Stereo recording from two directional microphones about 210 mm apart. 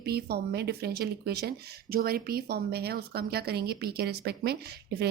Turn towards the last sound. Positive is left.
turn(degrees=-50)  # may be behind; listen again after turning